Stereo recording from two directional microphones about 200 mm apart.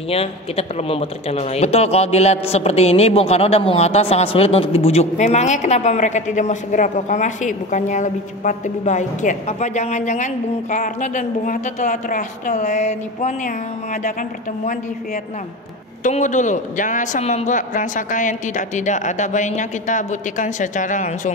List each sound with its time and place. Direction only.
0.1 s speech: 30° left (ahead or behind)
16.0 s speech: 40° left (ahead or behind)